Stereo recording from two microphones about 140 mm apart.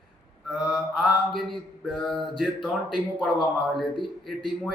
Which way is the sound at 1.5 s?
40° left (ahead or behind).